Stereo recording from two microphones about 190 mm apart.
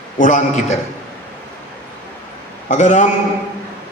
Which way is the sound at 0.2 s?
40° left (ahead or behind).